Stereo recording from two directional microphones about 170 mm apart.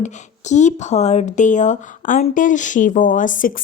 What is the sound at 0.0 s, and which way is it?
Speech, 45° left (ahead or behind).